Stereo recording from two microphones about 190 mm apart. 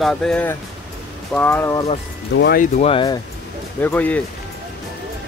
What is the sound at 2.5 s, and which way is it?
Speech, 40° left (ahead or behind).